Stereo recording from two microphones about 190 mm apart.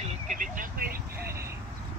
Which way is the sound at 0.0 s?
40° right (ahead or behind).